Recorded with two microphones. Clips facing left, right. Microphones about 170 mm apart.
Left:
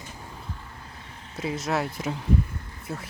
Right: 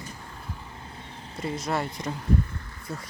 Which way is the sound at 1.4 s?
Centre (ahead or behind).